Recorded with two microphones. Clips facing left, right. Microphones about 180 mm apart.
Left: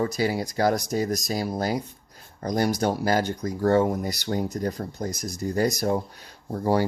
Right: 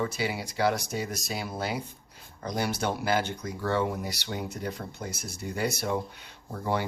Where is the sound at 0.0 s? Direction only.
40° left (ahead or behind).